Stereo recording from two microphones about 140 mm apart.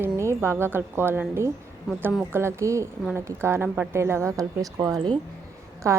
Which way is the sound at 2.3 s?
20° right (ahead or behind).